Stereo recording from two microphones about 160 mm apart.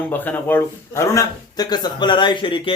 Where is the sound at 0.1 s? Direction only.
10° left (ahead or behind).